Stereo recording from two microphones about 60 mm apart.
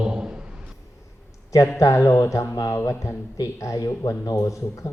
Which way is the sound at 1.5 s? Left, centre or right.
Left.